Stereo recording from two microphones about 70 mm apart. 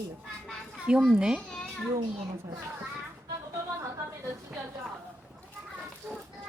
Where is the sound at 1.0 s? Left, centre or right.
Centre.